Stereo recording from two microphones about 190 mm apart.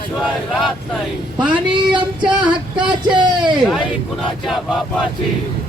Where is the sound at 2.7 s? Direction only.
25° right (ahead or behind).